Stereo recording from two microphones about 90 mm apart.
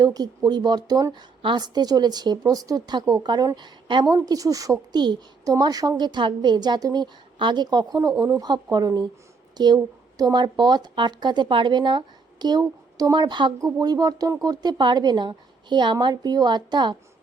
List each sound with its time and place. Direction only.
0.0 s speech: 45° right (ahead or behind)
4.1 s speech: 40° right (ahead or behind)
6.0 s speech: 55° right (ahead or behind)
7.3 s speech: 60° right (ahead or behind)
13.7 s speech: 45° right (ahead or behind)